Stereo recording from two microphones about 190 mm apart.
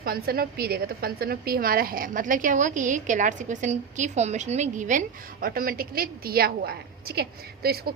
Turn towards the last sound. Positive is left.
turn(degrees=-55)  # may be behind; listen again after turning